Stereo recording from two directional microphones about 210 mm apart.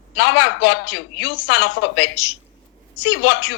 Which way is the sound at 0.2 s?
55° left (ahead or behind).